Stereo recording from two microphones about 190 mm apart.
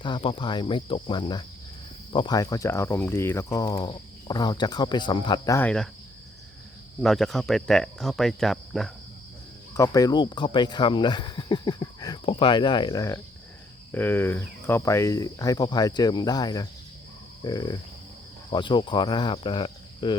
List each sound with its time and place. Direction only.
0.0 s cricket: 25° left (ahead or behind); by 5.9 s 5° left (ahead or behind)
7.0 s speech: centre (ahead or behind)
9.7 s cricket: 15° left (ahead or behind)